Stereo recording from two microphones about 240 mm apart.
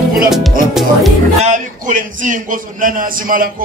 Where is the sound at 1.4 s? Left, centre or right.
Right.